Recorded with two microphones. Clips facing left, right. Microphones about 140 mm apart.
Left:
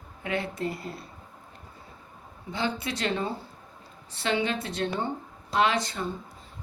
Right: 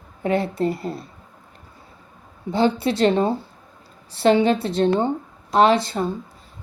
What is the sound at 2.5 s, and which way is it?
Speech, 35° right (ahead or behind).